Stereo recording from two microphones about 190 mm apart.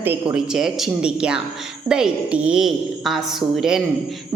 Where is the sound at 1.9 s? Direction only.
5° right (ahead or behind).